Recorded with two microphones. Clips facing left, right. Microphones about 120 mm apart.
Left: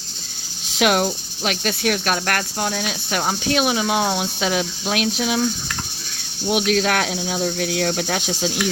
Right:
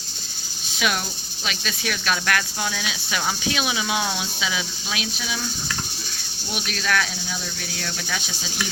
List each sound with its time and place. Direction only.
0.8 s speech: 70° left (ahead or behind)
6.5 s speech: 85° left; by 8.3 s 65° left (ahead or behind)